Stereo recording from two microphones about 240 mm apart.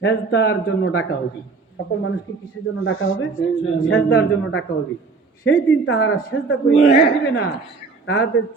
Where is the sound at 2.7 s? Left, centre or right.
Left.